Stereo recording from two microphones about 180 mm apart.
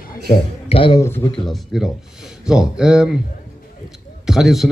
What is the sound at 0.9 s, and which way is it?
Speech, 15° left (ahead or behind).